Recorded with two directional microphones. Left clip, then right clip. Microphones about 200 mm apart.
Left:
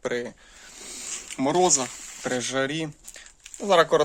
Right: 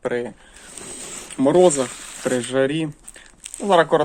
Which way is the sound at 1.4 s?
20° left (ahead or behind).